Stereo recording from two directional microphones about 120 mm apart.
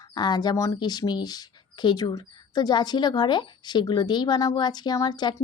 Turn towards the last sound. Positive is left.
turn(degrees=35)  # may be behind; listen again after turning